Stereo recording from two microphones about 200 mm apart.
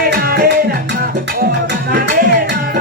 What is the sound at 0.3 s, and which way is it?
Music, 50° right (ahead or behind).